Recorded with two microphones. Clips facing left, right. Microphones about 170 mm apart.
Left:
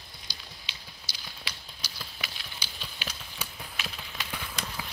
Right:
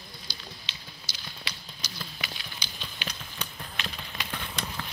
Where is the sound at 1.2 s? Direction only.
5° left (ahead or behind).